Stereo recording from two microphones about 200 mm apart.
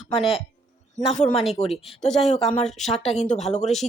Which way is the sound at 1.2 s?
30° left (ahead or behind).